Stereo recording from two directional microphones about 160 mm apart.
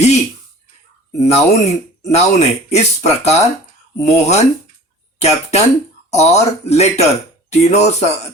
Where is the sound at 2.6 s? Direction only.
45° left (ahead or behind).